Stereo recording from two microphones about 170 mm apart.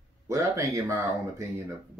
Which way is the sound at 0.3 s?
20° right (ahead or behind).